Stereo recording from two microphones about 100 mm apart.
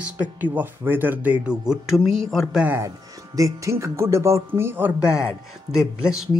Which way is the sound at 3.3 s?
35° right (ahead or behind).